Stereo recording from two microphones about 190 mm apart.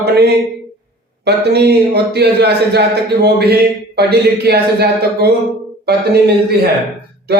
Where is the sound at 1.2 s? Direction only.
60° right (ahead or behind).